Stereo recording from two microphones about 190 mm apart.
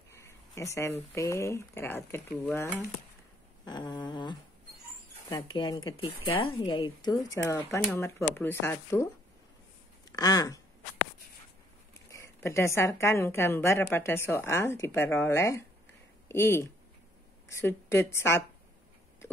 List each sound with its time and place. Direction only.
0.1 s a woman's voice: 15° left (ahead or behind)
12.1 s a woman's voice: 15° left (ahead or behind)